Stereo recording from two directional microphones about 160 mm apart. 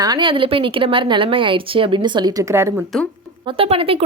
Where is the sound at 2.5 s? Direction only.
15° right (ahead or behind).